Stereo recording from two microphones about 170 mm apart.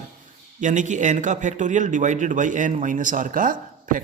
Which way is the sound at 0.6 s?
45° right (ahead or behind).